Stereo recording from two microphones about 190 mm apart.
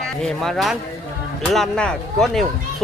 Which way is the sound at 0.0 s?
Centre (ahead or behind).